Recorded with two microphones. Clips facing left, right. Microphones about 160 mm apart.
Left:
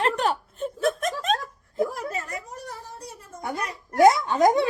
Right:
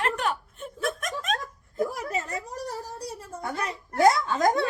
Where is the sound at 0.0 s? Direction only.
30° left (ahead or behind).